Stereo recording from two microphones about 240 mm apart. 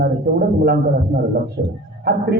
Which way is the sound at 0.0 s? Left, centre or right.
Right.